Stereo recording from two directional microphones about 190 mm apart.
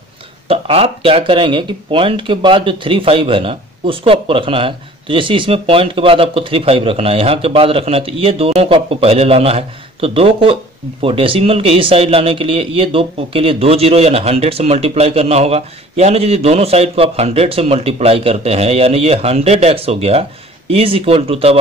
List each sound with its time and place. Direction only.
0.5 s speech: 30° right (ahead or behind)